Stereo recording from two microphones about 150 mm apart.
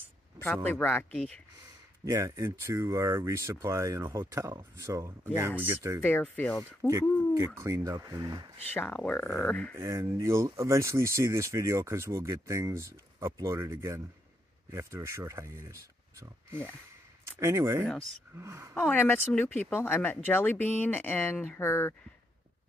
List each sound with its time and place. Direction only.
0.7 s speech: 15° left (ahead or behind)
2.0 s speech: 20° right (ahead or behind)
6.0 s speech: 10° left (ahead or behind)
6.9 s speech: 20° right (ahead or behind)
8.7 s speech: 10° left (ahead or behind)
9.8 s speech: 20° right (ahead or behind)
17.4 s speech: 20° right (ahead or behind)
18.8 s speech: 10° left (ahead or behind)